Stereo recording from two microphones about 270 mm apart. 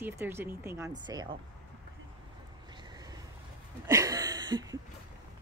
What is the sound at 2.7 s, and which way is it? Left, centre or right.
Vehicle, centre.